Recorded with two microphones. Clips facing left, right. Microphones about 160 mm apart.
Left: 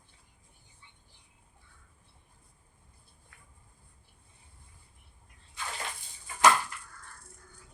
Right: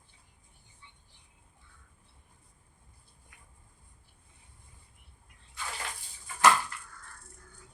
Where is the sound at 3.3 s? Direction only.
15° right (ahead or behind).